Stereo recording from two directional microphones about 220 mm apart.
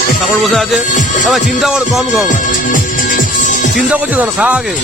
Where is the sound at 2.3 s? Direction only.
40° left (ahead or behind).